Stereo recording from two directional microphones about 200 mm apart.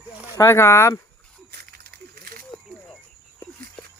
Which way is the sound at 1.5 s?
50° right (ahead or behind).